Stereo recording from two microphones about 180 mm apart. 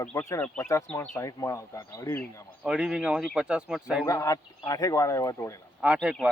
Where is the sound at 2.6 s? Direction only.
5° right (ahead or behind).